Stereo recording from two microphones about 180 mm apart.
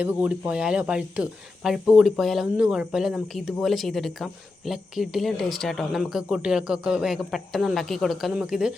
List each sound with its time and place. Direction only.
0.0 s speech: 10° right (ahead or behind)